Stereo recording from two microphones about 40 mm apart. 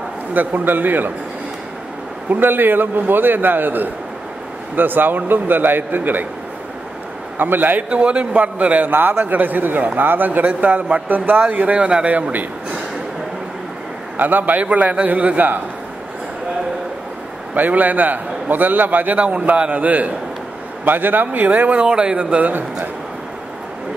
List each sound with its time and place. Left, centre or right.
0.3 s a man's voice: right
2.2 s a man's voice: right
7.3 s a man's voice: right
7.9 s a man's voice: right
8.9 s a man's voice: right
11.4 s speech: right
14.1 s a man's voice: right
17.6 s a man's voice: right
20.8 s a man's voice: right
21.5 s speech: right
21.8 s speech: right